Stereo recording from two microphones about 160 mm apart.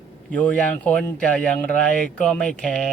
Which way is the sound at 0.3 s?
10° left (ahead or behind).